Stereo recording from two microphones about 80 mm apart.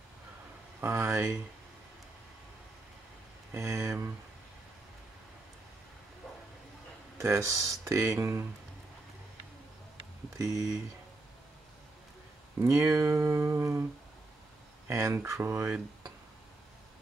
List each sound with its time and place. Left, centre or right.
0.7 s speech: right
3.5 s speech: right
7.2 s speech: right
10.3 s speech: right
12.5 s speech: right
14.9 s speech: right